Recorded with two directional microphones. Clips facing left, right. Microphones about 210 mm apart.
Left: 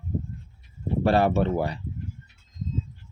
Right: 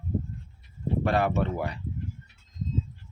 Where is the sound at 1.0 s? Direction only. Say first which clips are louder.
Left 5 dB; 30° left (ahead or behind).